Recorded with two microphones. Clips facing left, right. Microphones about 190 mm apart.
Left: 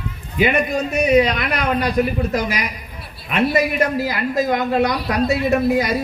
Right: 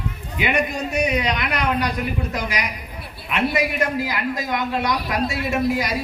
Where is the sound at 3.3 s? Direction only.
45° left (ahead or behind).